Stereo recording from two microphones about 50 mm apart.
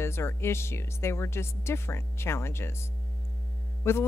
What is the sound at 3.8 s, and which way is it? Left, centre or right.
Music, left.